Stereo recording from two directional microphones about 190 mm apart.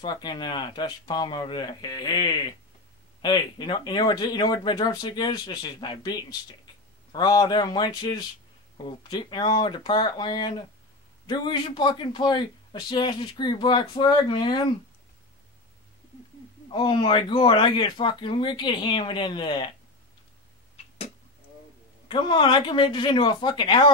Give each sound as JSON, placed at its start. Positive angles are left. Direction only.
{"t": 0.0, "sound": "speech", "side_deg": 20}
{"t": 16.7, "sound": "speech", "side_deg": 25}
{"t": 22.0, "sound": "speech", "side_deg": 25}